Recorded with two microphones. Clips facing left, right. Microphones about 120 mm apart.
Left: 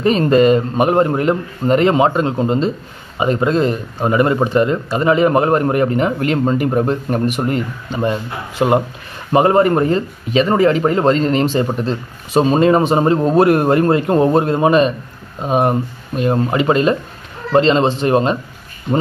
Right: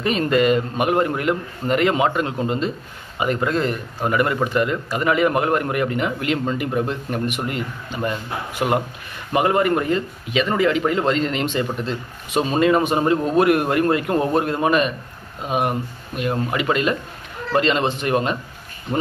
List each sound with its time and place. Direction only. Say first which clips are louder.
0.0 s speech: left 6 dB; 35° left (ahead or behind)
8.0 s a man's voice: left 5 dB; 25° left (ahead or behind)